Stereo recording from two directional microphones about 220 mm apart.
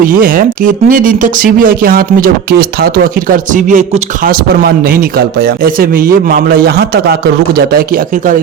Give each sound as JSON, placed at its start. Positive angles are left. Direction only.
{"t": 0.0, "sound": "speech", "side_deg": -40}